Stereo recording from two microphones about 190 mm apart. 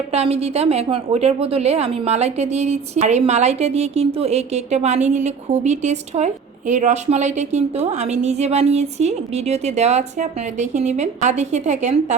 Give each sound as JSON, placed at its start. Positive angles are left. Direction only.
{"t": 0.1, "sound": "a woman's voice", "side_deg": -35}